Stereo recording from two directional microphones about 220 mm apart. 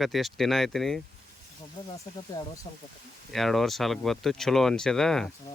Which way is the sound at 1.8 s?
20° left (ahead or behind).